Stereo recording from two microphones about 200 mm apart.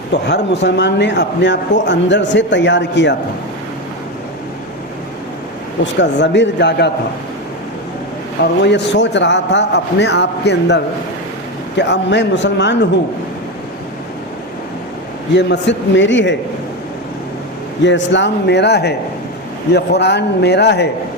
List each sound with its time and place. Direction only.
0.1 s a man's voice: 60° left (ahead or behind)
5.8 s a man's voice: 60° left (ahead or behind)
8.6 s a man's voice: 60° left (ahead or behind)
11.8 s a man's voice: 60° left (ahead or behind)
15.4 s a man's voice: 60° left (ahead or behind)
17.8 s a man's voice: 65° left (ahead or behind)